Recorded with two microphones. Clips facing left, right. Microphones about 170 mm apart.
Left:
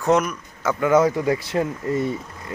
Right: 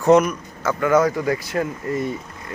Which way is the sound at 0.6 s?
20° left (ahead or behind).